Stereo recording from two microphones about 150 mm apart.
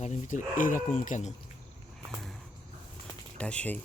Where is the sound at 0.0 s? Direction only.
50° left (ahead or behind).